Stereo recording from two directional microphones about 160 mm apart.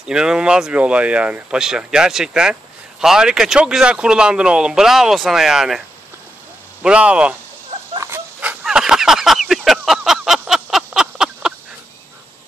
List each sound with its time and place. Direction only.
0.0 s speech: 5° right (ahead or behind)
6.8 s speech: 10° right (ahead or behind)
8.0 s a sound: 15° right (ahead or behind)